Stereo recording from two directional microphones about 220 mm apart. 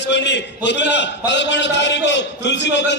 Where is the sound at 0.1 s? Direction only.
50° left (ahead or behind).